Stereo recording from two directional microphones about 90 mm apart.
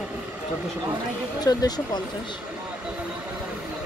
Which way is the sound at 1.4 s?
45° left (ahead or behind).